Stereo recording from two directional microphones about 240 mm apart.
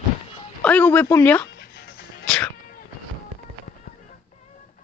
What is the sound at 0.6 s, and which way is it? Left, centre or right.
Speech, centre.